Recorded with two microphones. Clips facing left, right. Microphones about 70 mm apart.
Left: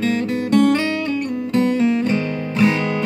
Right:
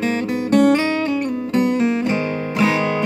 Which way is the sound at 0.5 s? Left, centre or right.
Right.